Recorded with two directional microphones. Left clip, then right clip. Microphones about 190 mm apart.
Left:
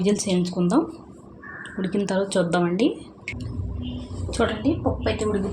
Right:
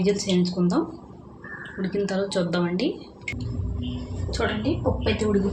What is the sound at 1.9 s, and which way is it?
Speech, 45° left (ahead or behind).